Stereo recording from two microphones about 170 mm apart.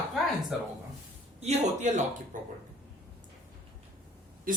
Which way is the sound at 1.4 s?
40° right (ahead or behind).